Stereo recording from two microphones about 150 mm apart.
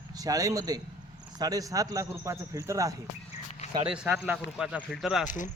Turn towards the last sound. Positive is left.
turn(degrees=60)  # may be behind; listen again after turning